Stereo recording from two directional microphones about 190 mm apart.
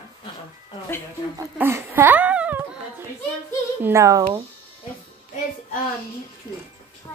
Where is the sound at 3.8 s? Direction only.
15° right (ahead or behind).